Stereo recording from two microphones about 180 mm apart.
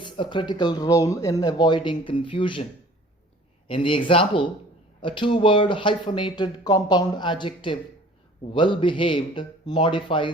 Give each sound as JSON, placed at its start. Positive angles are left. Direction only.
{"t": 0.0, "sound": "speech", "side_deg": 25}
{"t": 3.7, "sound": "speech", "side_deg": 30}